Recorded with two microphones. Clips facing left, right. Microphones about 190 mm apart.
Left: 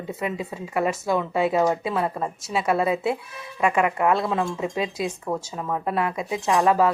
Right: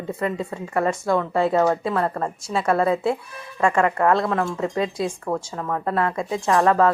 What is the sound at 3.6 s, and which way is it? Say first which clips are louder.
A woman's voice: right 2 dB; 15° left (ahead or behind).